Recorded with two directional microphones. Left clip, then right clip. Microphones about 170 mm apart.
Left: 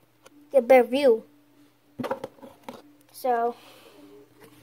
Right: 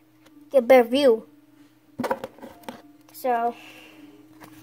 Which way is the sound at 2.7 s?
35° left (ahead or behind).